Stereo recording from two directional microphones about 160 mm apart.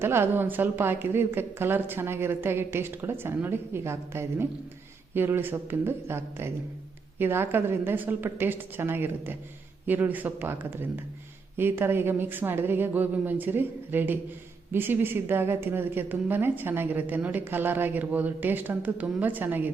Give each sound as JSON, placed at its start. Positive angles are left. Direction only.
{"t": 0.0, "sound": "a woman's voice", "side_deg": -15}